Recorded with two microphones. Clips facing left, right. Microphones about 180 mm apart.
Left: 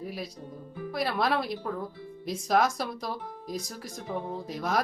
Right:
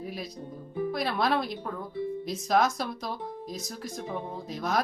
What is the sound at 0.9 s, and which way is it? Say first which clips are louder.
Speech: left 1 dB; 5° left (ahead or behind).